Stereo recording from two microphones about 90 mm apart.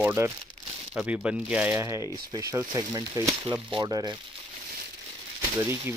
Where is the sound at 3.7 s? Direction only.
50° right (ahead or behind).